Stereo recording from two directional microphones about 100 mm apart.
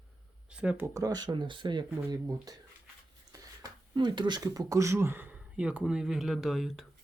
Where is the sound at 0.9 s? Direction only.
40° right (ahead or behind).